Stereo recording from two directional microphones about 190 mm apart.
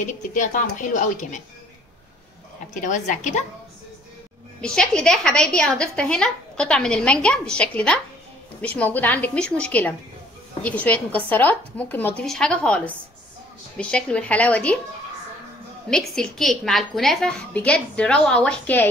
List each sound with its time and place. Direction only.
0.0 s a woman's voice: 45° left (ahead or behind)
2.7 s a woman's voice: 40° left (ahead or behind)
4.6 s a woman's voice: 5° left (ahead or behind)
15.9 s a woman's voice: centre (ahead or behind)